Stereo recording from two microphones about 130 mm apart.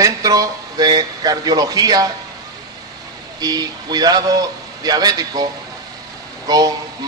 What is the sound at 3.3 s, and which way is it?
Speech, 30° right (ahead or behind).